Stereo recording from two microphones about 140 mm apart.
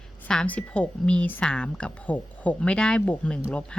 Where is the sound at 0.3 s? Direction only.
10° left (ahead or behind).